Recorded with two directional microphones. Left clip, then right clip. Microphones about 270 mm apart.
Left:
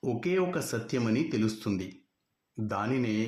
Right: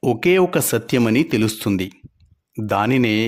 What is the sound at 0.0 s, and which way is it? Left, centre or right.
Speech, right.